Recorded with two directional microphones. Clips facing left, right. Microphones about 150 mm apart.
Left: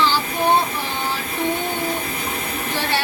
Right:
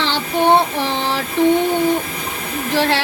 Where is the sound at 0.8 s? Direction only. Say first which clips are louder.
Right 6 dB; 80° right.